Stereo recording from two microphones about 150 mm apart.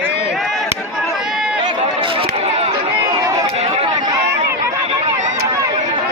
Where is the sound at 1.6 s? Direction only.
35° right (ahead or behind).